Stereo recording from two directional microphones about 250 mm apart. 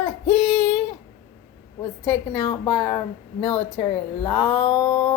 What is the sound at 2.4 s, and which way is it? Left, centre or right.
Speech, centre.